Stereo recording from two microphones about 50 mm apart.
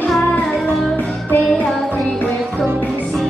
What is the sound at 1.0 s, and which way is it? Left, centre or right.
Music, left.